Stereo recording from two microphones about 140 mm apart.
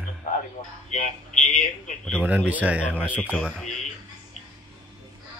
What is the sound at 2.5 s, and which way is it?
Speech, 10° right (ahead or behind).